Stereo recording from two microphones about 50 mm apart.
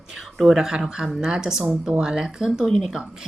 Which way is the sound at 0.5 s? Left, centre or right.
Centre.